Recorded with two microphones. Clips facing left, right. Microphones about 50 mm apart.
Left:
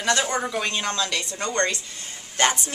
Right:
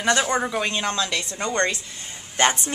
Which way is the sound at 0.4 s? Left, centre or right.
Centre.